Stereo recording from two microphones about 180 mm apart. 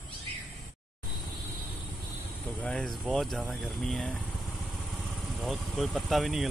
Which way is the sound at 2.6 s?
Centre (ahead or behind).